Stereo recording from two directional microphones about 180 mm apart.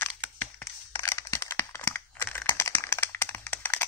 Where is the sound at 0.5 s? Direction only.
10° left (ahead or behind).